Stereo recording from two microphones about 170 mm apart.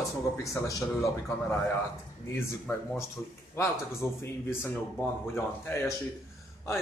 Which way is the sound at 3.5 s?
15° left (ahead or behind).